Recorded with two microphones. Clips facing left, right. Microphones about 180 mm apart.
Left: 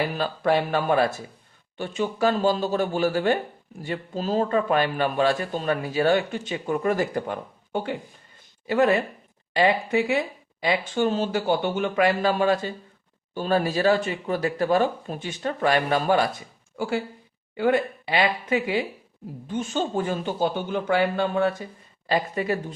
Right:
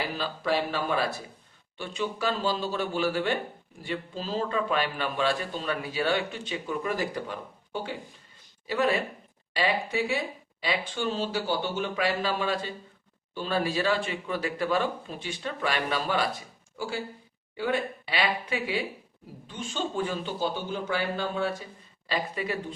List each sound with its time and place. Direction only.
0.2 s a man's voice: 55° left (ahead or behind)